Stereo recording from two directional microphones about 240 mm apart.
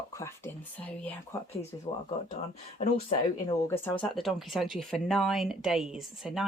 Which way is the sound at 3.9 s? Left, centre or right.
Centre.